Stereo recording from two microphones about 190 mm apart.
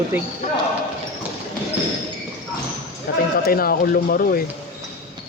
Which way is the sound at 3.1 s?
50° left (ahead or behind).